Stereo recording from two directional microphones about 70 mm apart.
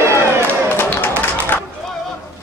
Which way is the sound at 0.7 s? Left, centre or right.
Left.